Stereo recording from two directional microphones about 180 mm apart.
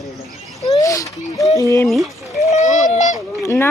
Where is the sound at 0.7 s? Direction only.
20° left (ahead or behind).